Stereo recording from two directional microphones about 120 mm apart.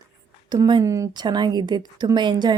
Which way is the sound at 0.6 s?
30° right (ahead or behind).